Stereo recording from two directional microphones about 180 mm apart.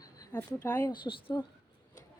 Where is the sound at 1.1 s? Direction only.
20° left (ahead or behind).